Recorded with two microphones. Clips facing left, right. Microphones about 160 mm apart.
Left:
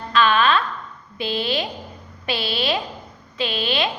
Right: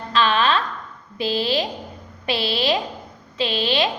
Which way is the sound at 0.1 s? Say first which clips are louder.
Left 1 dB; 30° right (ahead or behind).